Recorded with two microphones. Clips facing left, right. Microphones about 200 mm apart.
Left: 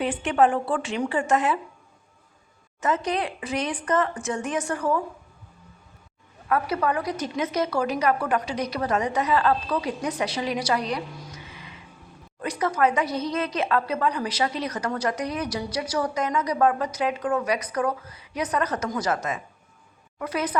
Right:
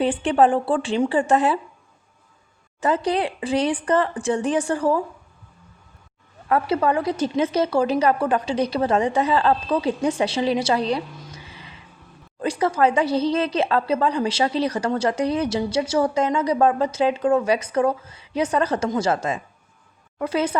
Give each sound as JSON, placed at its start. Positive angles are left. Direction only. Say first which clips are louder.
{"t": 0.0, "sound": "speech", "louder": "right 3 dB", "side_deg": -30}
{"t": 2.8, "sound": "speech", "louder": "right 4 dB", "side_deg": -30}
{"t": 6.5, "sound": "a woman's voice", "louder": "right 4 dB", "side_deg": -30}